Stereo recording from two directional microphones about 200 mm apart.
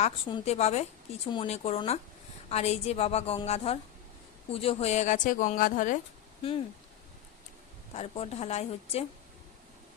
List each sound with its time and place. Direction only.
0.0 s speech: 25° left (ahead or behind)
6.4 s speech: 25° left (ahead or behind)
7.9 s speech: 30° left (ahead or behind)